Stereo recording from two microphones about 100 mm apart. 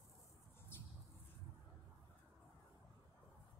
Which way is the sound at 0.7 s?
25° left (ahead or behind).